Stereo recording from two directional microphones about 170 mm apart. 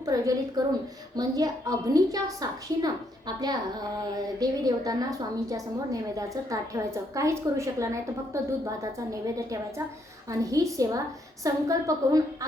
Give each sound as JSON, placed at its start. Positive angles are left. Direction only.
{"t": 0.0, "sound": "a woman's voice", "side_deg": -20}